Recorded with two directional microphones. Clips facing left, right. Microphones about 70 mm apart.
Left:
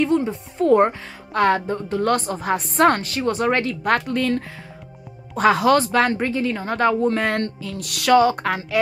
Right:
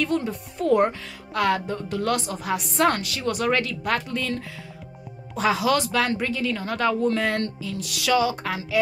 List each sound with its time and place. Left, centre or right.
0.0 s speech: left
3.9 s speech: left